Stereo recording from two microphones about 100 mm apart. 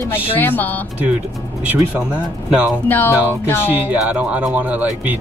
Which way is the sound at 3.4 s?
20° left (ahead or behind).